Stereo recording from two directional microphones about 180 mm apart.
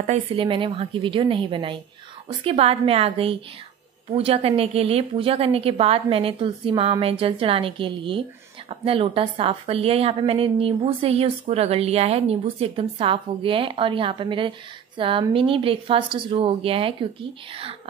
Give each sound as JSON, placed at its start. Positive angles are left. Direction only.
{"t": 0.0, "sound": "a woman's voice", "side_deg": -35}